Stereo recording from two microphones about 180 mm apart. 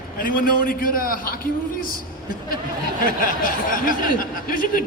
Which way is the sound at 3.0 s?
50° left (ahead or behind).